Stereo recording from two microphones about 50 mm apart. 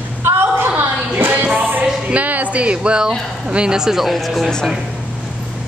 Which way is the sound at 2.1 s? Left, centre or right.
Right.